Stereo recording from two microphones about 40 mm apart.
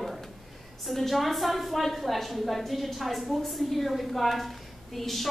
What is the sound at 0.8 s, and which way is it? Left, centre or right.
A woman's voice, centre.